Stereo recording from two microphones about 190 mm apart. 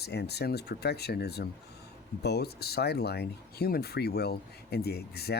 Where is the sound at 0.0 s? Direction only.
60° left (ahead or behind).